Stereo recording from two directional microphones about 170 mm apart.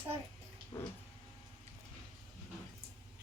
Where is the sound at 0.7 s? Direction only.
20° left (ahead or behind).